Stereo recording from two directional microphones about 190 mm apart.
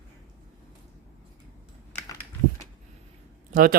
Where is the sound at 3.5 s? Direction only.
45° right (ahead or behind).